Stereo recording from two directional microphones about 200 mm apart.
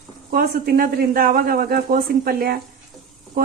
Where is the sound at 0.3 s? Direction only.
50° right (ahead or behind).